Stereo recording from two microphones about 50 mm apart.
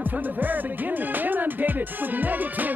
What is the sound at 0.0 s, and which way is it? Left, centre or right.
Music, right.